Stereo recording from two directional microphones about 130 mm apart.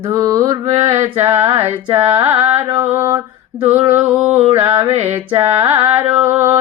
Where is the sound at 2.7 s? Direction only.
20° right (ahead or behind).